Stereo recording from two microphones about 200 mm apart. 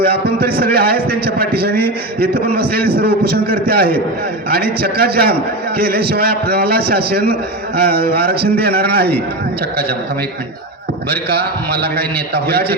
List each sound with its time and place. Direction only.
0.3 s a man's voice: 50° right (ahead or behind)
11.1 s a man's voice: 50° right (ahead or behind)